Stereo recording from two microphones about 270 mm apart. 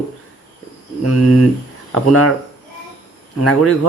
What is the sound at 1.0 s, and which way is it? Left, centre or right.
Speech, left.